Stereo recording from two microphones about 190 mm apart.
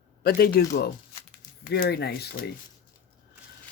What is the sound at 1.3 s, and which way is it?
Speech, 50° left (ahead or behind).